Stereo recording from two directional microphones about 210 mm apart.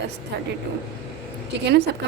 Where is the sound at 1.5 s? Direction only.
55° right (ahead or behind).